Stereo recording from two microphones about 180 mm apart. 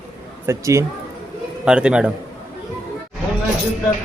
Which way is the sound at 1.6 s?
5° right (ahead or behind).